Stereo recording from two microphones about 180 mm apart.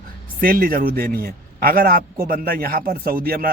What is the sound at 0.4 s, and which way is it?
A man's voice, 55° right (ahead or behind).